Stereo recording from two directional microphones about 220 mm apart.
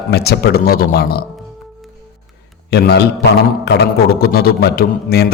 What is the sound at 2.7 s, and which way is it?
A man's voice, 50° left (ahead or behind).